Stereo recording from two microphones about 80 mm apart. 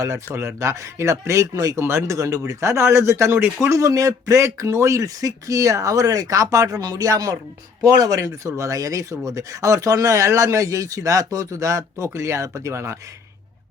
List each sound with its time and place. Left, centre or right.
0.3 s speech: right